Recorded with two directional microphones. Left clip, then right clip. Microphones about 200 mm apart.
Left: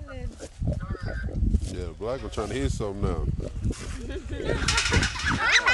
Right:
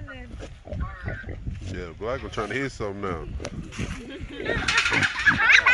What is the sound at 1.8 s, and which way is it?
Speech, centre (ahead or behind).